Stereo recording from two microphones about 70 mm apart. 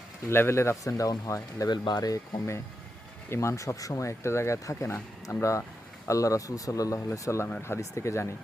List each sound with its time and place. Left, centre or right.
0.3 s speech: left
1.7 s speech: left
3.2 s speech: left
7.1 s speech: left